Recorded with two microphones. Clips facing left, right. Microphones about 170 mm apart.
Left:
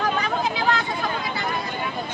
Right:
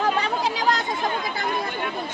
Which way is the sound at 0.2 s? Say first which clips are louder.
Even; 35° right (ahead or behind).